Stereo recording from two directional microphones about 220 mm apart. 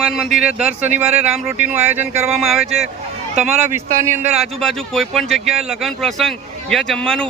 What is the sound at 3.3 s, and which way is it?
Speech, 30° right (ahead or behind).